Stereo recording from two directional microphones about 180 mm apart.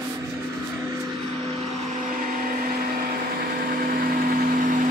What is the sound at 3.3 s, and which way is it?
Vehicle, 55° right (ahead or behind).